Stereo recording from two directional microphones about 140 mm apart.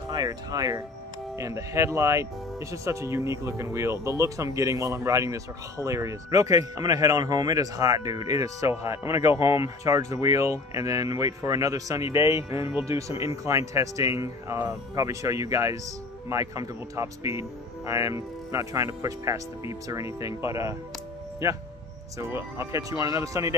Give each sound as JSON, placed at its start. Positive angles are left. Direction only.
{"t": 0.1, "sound": "speech", "side_deg": -25}
{"t": 22.2, "sound": "speech", "side_deg": -20}